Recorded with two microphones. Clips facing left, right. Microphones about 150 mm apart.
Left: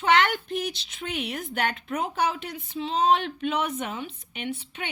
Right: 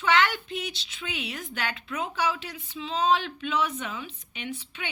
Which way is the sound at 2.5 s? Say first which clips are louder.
Left 4 dB; 35° left (ahead or behind).